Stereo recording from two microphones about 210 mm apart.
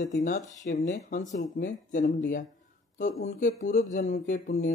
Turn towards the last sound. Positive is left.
turn(degrees=35)  # may be behind; listen again after turning